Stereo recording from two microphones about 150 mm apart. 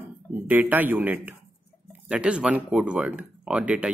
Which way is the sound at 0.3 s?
10° right (ahead or behind).